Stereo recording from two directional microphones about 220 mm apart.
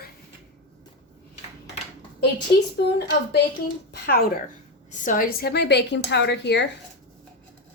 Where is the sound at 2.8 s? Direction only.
50° left (ahead or behind).